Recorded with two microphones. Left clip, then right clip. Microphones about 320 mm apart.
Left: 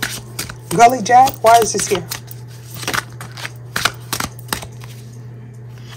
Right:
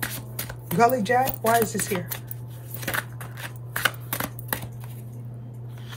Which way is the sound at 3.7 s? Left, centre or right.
Left.